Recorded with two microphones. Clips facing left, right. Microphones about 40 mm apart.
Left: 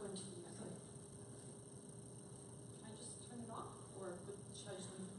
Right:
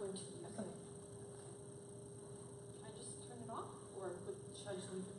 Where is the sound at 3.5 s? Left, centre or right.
Centre.